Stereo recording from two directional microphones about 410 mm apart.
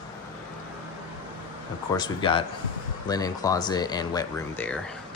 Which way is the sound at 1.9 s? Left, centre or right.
Centre.